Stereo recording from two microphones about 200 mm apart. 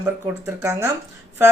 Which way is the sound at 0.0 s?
10° right (ahead or behind).